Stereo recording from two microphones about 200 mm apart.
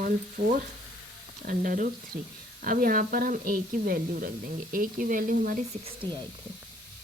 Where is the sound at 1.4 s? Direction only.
45° right (ahead or behind).